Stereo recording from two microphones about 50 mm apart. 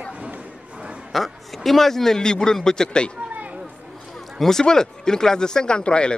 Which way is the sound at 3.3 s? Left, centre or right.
Right.